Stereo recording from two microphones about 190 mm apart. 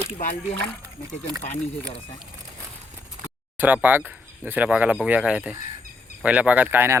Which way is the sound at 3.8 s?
10° right (ahead or behind).